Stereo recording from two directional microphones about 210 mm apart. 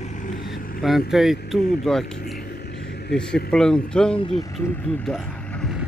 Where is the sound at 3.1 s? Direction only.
5° left (ahead or behind).